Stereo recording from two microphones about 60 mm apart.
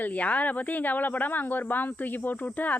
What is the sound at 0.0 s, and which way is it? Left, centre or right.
A woman's voice, left.